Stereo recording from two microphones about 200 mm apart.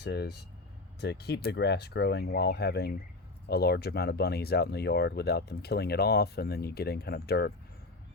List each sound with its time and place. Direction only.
0.0 s speech: 55° left (ahead or behind)